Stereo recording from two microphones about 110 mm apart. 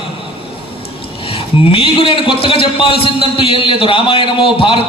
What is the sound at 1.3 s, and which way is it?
A man's voice, 60° left (ahead or behind).